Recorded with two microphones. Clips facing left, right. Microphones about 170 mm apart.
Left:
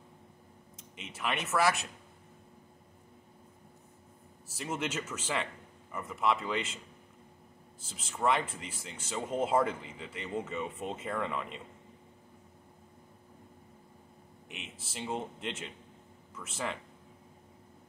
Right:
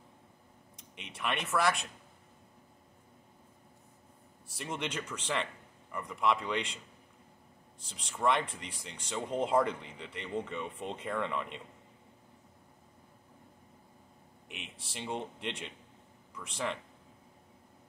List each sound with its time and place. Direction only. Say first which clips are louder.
0.7 s speech: left 1 dB; centre (ahead or behind)
4.5 s speech: left 2 dB; 5° left (ahead or behind)
7.8 s speech: even; 5° left (ahead or behind)
14.5 s speech: left 1 dB; centre (ahead or behind)